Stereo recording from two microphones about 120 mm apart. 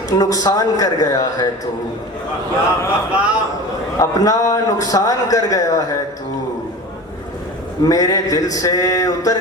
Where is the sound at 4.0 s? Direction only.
30° left (ahead or behind).